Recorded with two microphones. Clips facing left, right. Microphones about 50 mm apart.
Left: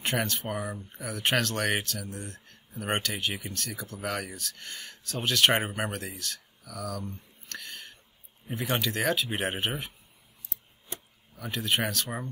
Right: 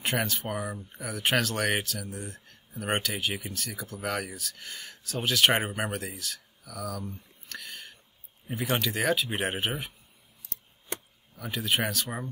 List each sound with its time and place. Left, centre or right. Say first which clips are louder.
0.0 s speech: even; centre
10.4 s scissors: even; right
11.3 s speech: even; centre